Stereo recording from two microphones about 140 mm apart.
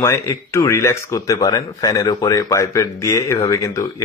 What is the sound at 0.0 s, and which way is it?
Speech, 20° left (ahead or behind).